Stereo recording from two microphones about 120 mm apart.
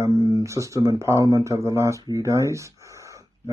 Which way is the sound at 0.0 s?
25° right (ahead or behind).